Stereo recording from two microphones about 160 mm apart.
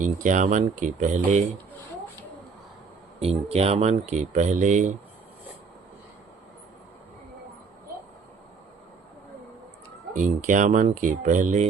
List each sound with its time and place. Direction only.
0.0 s speech: 55° right (ahead or behind)
3.2 s speech: 40° right (ahead or behind)
10.2 s speech: 50° right (ahead or behind)